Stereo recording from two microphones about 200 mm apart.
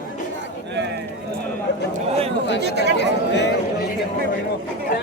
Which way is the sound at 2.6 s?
55° right (ahead or behind).